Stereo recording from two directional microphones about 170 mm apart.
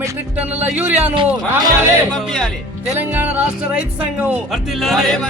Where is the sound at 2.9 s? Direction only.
10° right (ahead or behind).